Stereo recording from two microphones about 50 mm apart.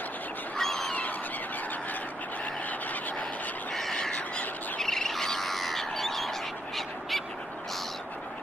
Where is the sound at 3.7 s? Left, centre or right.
Centre.